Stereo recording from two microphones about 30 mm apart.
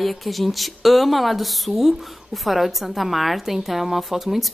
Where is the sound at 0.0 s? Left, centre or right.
Centre.